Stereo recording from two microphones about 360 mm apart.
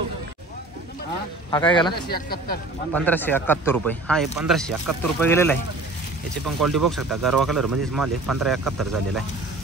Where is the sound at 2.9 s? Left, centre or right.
Centre.